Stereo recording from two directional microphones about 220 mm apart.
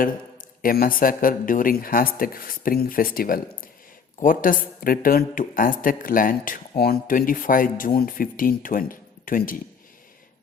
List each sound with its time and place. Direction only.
0.6 s speech: 40° left (ahead or behind)